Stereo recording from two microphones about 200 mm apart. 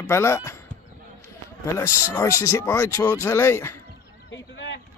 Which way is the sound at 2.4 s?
15° left (ahead or behind).